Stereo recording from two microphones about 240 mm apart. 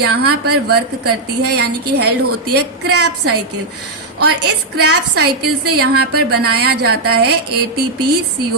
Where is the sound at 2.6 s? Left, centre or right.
Right.